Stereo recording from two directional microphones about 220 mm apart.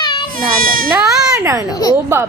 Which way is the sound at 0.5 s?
40° right (ahead or behind).